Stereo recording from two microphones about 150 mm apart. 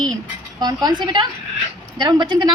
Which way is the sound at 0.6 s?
25° right (ahead or behind).